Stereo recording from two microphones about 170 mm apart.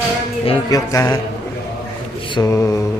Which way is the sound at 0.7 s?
20° left (ahead or behind).